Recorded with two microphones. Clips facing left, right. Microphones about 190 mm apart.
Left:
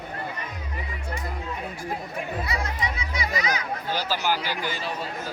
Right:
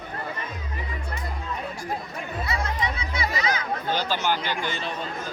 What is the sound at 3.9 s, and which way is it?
A man's voice, 5° left (ahead or behind).